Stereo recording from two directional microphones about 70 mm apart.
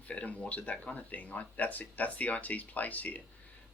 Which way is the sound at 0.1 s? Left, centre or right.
Centre.